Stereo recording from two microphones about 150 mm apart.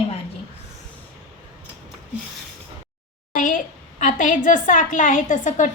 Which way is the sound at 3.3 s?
60° left (ahead or behind).